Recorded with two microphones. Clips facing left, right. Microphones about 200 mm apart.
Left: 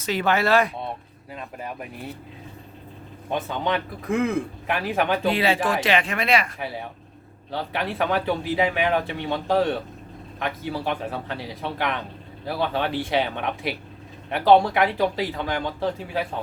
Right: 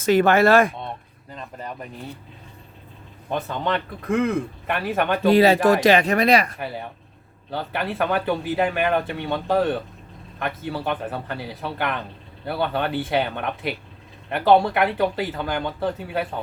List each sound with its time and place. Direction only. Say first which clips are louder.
0.0 s speech: right 7 dB; 50° right (ahead or behind)
1.3 s speech: even; 5° left (ahead or behind)
3.2 s speech: even; centre (ahead or behind)
5.3 s speech: right 7 dB; 40° right (ahead or behind)
6.6 s speech: right 1 dB; centre (ahead or behind)